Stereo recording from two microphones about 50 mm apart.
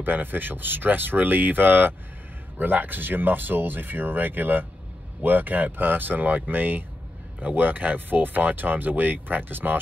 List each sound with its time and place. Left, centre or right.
0.0 s speech: right